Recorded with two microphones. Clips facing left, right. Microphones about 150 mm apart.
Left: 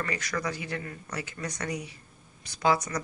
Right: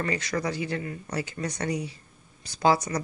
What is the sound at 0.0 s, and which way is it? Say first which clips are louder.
Speech: right 4 dB; 25° right (ahead or behind).